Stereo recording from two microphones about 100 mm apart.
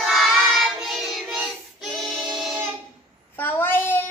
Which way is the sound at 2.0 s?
Centre (ahead or behind).